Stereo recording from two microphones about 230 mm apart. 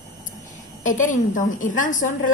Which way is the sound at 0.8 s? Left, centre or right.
Left.